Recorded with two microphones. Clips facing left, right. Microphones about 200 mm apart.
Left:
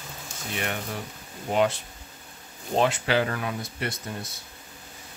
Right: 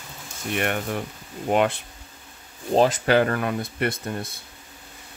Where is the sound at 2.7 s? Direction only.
35° right (ahead or behind).